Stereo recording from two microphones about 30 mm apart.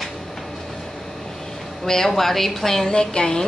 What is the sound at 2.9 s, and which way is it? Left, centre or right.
Speech, left.